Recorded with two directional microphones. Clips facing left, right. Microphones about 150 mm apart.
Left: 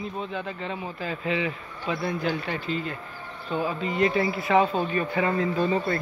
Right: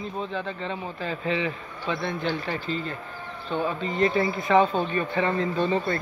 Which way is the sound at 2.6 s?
35° right (ahead or behind).